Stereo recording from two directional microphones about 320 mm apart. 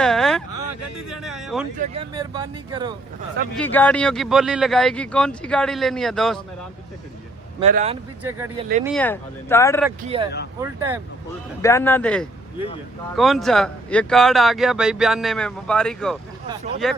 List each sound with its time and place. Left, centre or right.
0.0 s a sound: centre
0.5 s a sound: left
1.1 s speech: centre
1.8 s speech: centre
3.6 s speech: centre
7.6 s speech: right
8.2 s speech: centre
10.1 s speech: centre
10.6 s speech: centre
11.6 s speech: centre
12.5 s speech: centre
13.1 s speech: centre